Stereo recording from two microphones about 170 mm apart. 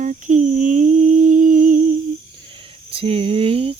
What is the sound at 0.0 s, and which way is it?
Humming, 45° right (ahead or behind).